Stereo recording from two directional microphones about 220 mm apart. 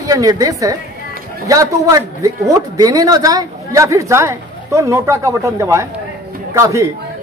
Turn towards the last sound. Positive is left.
turn(degrees=-15)  # may be behind; listen again after turning